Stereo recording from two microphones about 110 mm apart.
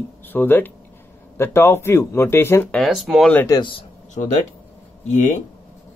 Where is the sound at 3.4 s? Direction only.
45° left (ahead or behind).